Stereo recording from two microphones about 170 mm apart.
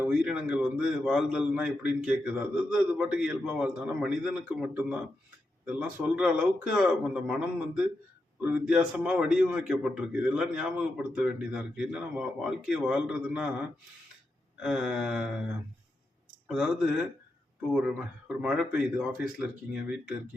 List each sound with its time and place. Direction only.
0.0 s a man's voice: 5° right (ahead or behind)
14.6 s a man's voice: 5° right (ahead or behind)
16.5 s a man's voice: 5° right (ahead or behind)